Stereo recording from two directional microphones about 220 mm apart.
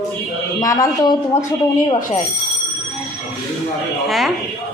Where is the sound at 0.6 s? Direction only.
15° left (ahead or behind).